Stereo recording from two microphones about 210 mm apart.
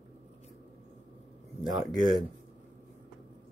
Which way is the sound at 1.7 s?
20° right (ahead or behind).